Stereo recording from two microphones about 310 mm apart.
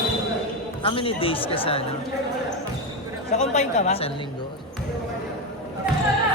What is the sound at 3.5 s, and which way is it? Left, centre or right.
Speech, left.